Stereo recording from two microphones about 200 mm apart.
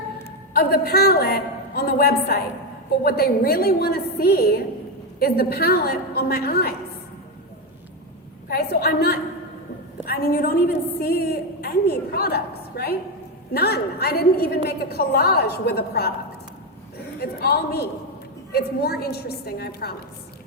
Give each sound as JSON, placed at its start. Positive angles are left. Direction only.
{"t": 0.5, "sound": "a woman's voice", "side_deg": 50}
{"t": 8.4, "sound": "a woman's voice", "side_deg": 50}
{"t": 17.2, "sound": "a woman's voice", "side_deg": 50}